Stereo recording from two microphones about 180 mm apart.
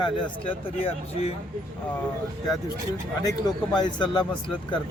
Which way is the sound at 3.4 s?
20° left (ahead or behind).